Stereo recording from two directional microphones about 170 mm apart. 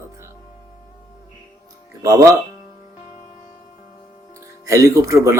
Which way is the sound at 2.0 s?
20° right (ahead or behind).